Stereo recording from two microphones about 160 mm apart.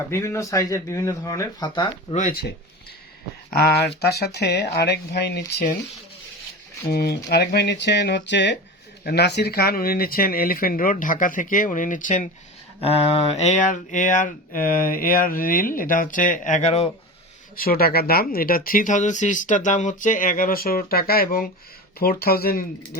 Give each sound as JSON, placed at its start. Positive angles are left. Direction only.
{"t": 0.1, "sound": "speech", "side_deg": 15}
{"t": 2.1, "sound": "speech", "side_deg": 55}
{"t": 3.5, "sound": "speech", "side_deg": 90}
{"t": 6.9, "sound": "speech", "side_deg": 85}
{"t": 12.8, "sound": "speech", "side_deg": 40}
{"t": 17.6, "sound": "speech", "side_deg": 70}